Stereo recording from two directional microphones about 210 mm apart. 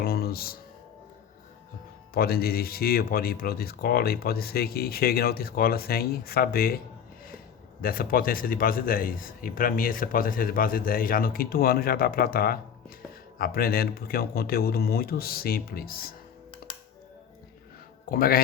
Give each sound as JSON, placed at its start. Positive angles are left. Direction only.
{"t": 0.0, "sound": "music", "side_deg": 45}
{"t": 2.1, "sound": "a man's voice", "side_deg": 45}
{"t": 18.1, "sound": "a man's voice", "side_deg": 45}